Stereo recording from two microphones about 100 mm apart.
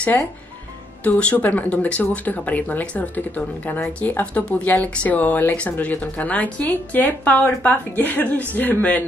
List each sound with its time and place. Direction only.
1.0 s speech: 15° left (ahead or behind)